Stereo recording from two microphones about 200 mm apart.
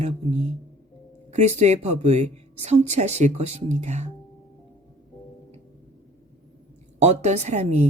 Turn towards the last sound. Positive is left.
turn(degrees=-35)  # may be behind; listen again after turning